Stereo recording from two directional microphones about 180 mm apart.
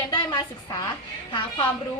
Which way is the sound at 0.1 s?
25° left (ahead or behind).